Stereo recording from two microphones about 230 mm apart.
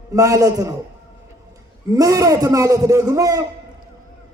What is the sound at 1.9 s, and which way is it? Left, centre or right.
A man's voice, centre.